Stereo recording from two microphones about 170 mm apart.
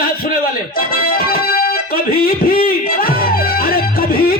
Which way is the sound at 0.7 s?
60° left (ahead or behind).